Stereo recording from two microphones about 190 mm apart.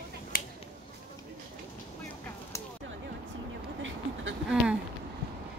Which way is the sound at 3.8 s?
90° right.